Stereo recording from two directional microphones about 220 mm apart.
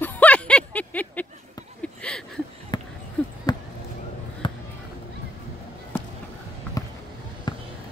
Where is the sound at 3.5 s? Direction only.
20° left (ahead or behind).